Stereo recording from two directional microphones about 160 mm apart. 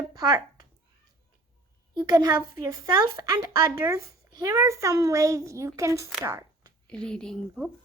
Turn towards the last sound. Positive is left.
turn(degrees=0)  # may be behind; listen again after turning